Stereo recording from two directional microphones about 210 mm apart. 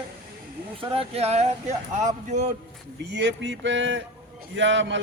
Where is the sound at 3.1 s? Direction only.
55° right (ahead or behind).